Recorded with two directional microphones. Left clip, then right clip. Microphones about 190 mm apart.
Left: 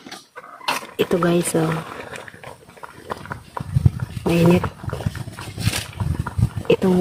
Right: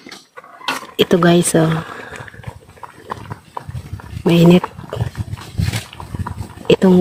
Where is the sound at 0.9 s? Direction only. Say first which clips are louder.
Right 7 dB; 50° right (ahead or behind).